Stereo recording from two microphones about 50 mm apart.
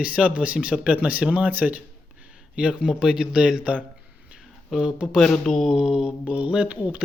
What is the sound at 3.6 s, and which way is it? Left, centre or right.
Speech, right.